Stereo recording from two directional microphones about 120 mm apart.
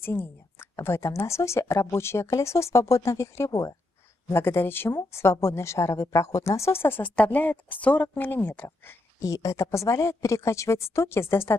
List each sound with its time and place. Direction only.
0.0 s a woman's voice: 20° left (ahead or behind)